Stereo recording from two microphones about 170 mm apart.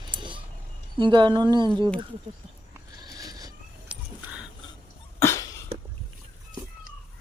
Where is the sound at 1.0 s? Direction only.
25° right (ahead or behind).